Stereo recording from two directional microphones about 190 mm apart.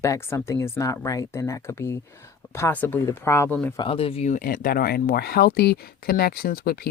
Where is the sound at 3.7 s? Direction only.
30° left (ahead or behind).